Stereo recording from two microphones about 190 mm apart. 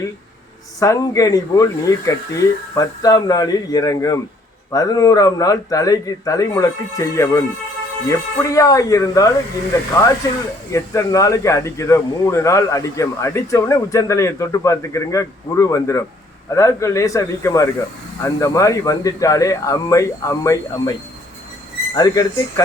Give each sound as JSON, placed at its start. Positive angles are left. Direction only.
{"t": 0.8, "sound": "speech", "side_deg": 20}
{"t": 21.9, "sound": "speech", "side_deg": 20}